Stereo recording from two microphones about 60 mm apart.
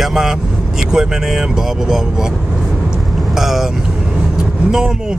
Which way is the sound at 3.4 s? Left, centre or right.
Centre.